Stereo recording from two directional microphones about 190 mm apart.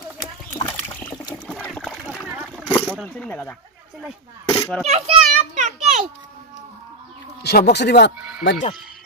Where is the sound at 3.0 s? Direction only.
5° left (ahead or behind).